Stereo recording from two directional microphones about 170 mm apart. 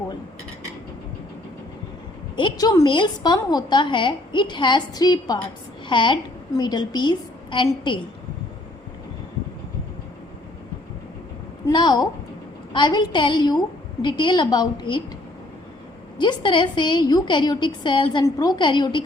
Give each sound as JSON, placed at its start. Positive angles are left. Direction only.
{"t": 2.3, "sound": "a woman's voice", "side_deg": 25}
{"t": 11.6, "sound": "a woman's voice", "side_deg": 25}
{"t": 16.1, "sound": "a woman's voice", "side_deg": 25}